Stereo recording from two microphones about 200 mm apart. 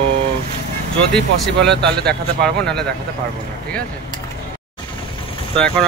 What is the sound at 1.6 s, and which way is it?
Speech, 55° right (ahead or behind).